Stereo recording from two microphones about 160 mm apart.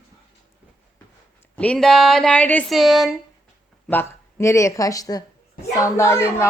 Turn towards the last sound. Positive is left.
turn(degrees=15)  # may be behind; listen again after turning